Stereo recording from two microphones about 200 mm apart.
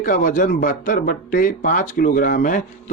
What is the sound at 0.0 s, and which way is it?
Speech, 40° left (ahead or behind).